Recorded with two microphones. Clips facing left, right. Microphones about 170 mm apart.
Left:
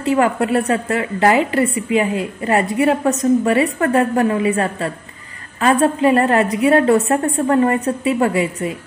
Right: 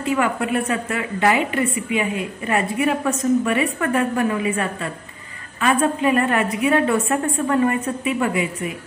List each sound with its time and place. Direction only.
0.1 s a woman's voice: 35° left (ahead or behind)